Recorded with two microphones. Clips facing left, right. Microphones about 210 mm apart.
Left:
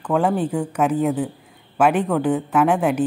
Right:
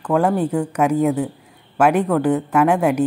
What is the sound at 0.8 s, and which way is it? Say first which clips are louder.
Speech: right 2 dB; 10° right (ahead or behind).